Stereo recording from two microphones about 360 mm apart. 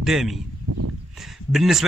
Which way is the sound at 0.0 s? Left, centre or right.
Centre.